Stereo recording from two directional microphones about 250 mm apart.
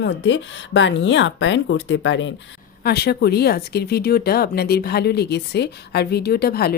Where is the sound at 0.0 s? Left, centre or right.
Left.